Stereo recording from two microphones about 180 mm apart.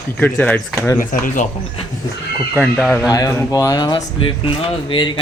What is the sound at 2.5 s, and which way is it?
Speech, centre (ahead or behind).